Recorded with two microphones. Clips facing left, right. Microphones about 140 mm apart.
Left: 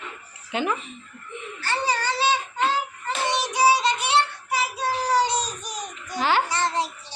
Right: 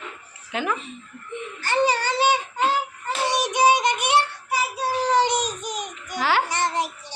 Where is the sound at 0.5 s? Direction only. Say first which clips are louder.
Left 1 dB; 20° left (ahead or behind).